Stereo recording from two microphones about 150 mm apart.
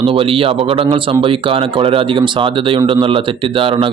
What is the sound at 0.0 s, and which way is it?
A man's voice, 40° right (ahead or behind).